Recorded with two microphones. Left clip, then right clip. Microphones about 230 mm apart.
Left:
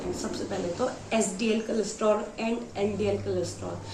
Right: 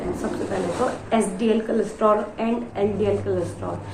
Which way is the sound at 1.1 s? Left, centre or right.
Centre.